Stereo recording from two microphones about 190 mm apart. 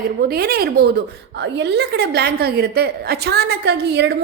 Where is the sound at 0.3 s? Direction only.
55° right (ahead or behind).